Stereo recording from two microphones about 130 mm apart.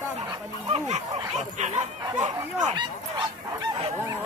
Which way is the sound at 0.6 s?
60° right (ahead or behind).